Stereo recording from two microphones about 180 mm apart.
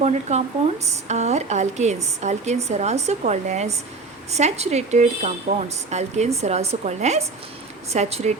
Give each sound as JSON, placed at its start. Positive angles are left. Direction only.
{"t": 0.0, "sound": "a woman's voice", "side_deg": -40}